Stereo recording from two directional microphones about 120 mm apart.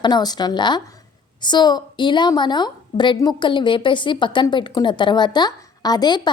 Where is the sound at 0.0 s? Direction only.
35° left (ahead or behind).